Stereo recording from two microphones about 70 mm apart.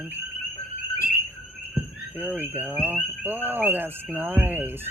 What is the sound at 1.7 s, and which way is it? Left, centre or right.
Speech, right.